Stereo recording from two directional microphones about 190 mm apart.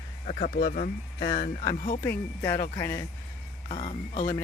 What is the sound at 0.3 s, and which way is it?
Speech, 40° left (ahead or behind).